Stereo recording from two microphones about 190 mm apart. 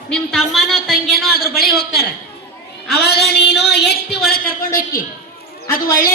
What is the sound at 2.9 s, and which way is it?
A woman's voice, 55° left (ahead or behind).